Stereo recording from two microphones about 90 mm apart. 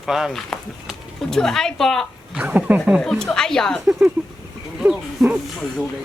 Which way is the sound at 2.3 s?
15° right (ahead or behind).